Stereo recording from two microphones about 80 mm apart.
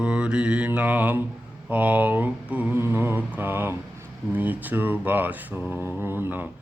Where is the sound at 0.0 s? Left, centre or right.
Centre.